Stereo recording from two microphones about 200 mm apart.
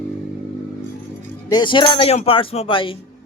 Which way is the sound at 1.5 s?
25° left (ahead or behind).